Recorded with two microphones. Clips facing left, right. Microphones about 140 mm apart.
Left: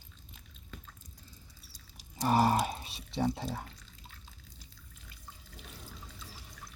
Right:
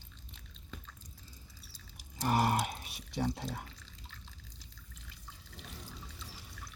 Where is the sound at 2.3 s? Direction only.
30° left (ahead or behind).